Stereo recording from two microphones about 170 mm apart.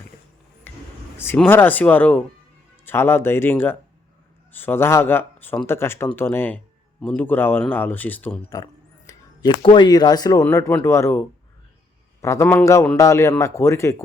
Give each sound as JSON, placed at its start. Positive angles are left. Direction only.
{"t": 1.5, "sound": "speech", "side_deg": 10}
{"t": 8.4, "sound": "speech", "side_deg": 20}